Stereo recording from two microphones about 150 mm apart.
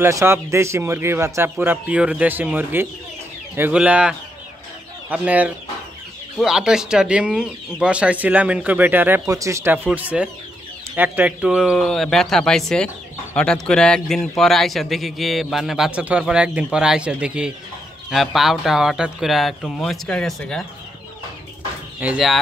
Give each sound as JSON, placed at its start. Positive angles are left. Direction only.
{"t": 0.0, "sound": "a man's voice", "side_deg": -20}
{"t": 22.0, "sound": "a man's voice", "side_deg": -5}